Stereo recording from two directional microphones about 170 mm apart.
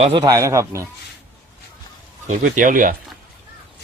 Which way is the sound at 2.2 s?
50° right (ahead or behind).